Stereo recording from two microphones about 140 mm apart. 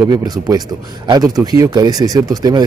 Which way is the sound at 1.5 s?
25° right (ahead or behind).